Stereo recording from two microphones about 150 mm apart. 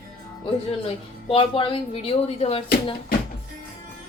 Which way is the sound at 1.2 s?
35° left (ahead or behind).